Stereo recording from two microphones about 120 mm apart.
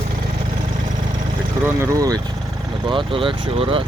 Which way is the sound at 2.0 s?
30° right (ahead or behind).